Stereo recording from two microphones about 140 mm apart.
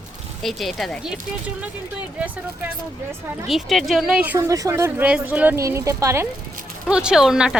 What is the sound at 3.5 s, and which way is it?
Speech, centre (ahead or behind).